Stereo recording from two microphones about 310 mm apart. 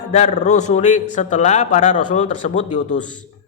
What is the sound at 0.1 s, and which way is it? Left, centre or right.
A man's voice, left.